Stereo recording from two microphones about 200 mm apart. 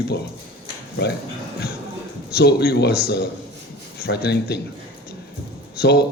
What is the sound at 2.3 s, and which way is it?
A man's voice, 55° left (ahead or behind).